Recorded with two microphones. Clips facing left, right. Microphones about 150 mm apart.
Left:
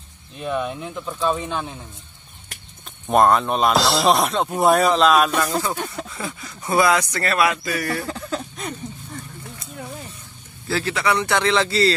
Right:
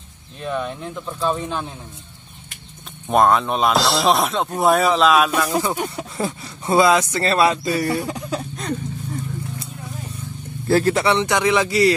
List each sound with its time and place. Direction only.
0.4 s speech: 5° left (ahead or behind)
3.1 s speech: centre (ahead or behind)
5.6 s speech: 15° right (ahead or behind)
6.1 s speech: 35° right (ahead or behind); by 8.5 s 10° right (ahead or behind)
10.7 s speech: 45° right (ahead or behind)
11.1 s speech: 20° right (ahead or behind)